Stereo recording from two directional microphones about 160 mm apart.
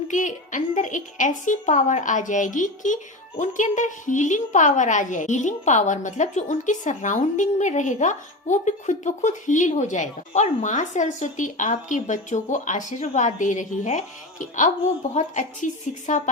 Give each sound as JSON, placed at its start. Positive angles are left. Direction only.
{"t": 0.1, "sound": "a woman's voice", "side_deg": 50}